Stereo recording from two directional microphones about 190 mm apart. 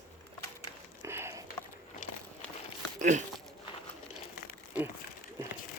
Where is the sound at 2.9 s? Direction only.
40° right (ahead or behind).